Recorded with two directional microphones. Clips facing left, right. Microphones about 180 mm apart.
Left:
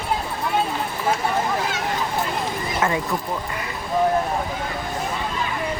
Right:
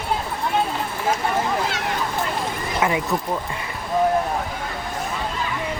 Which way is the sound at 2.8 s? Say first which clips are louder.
Right 2 dB; 15° right (ahead or behind).